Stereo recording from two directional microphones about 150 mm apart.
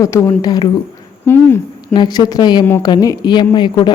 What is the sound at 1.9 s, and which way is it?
A woman's voice, 30° left (ahead or behind).